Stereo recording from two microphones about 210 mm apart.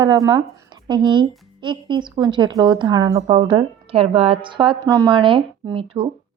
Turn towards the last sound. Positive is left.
turn(degrees=-25)  # may be behind; listen again after turning